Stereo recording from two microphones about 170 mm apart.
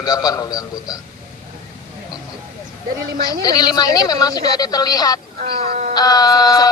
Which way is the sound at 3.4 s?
25° left (ahead or behind).